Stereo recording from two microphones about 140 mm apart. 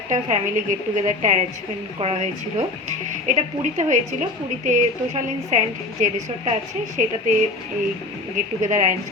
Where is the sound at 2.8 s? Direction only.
60° right (ahead or behind).